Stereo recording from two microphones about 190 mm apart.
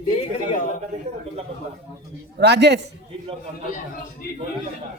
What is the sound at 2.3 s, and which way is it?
Speech, 60° right (ahead or behind).